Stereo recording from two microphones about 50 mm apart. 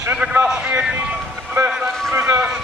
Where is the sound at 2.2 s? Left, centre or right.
Centre.